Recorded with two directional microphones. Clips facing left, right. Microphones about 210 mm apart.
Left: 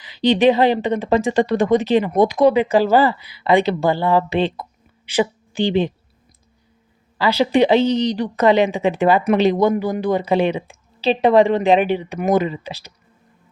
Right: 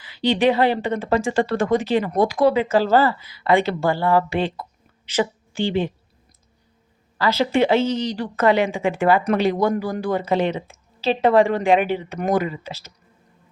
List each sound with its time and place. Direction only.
0.0 s a woman's voice: 20° left (ahead or behind)
7.2 s speech: 15° left (ahead or behind)